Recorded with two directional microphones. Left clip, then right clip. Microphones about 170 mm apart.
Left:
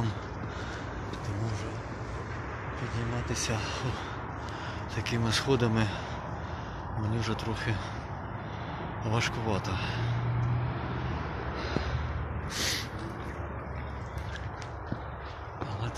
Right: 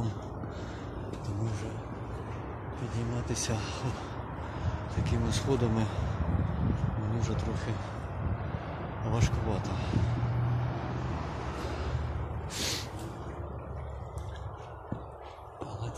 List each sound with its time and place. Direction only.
3.3 s speech: 40° right (ahead or behind)
5.0 s speech: 10° right (ahead or behind)
7.2 s speech: 10° right (ahead or behind)
9.0 s speech: 10° right (ahead or behind)
12.5 s a sound: 20° right (ahead or behind)